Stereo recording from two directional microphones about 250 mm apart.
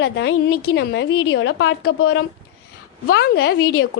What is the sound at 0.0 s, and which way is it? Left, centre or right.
A woman's voice, left.